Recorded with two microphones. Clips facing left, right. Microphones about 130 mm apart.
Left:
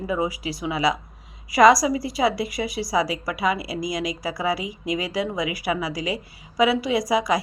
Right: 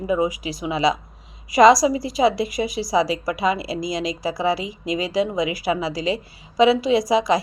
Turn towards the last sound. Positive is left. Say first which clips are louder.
# right 3 dB
turn(degrees=-25)  # may be behind; listen again after turning